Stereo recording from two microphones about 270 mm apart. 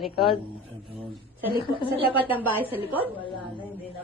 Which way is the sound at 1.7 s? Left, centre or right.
Centre.